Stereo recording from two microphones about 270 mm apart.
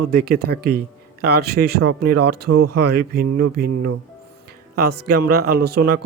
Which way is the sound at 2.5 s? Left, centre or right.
Right.